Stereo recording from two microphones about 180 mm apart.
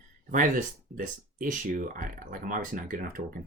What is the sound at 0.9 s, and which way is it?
Speech, 50° right (ahead or behind).